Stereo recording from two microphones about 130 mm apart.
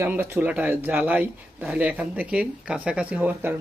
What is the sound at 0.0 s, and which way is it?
Speech, 20° right (ahead or behind).